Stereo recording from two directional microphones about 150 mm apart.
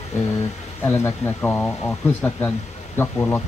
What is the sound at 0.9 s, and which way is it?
Speech, 15° left (ahead or behind).